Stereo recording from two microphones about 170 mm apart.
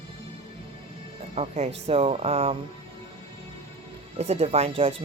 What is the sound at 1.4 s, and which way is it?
Speech, 40° right (ahead or behind).